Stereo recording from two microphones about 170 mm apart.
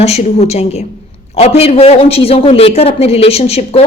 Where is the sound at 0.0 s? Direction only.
40° left (ahead or behind).